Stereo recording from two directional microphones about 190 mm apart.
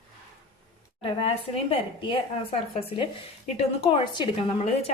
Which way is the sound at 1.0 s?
30° left (ahead or behind).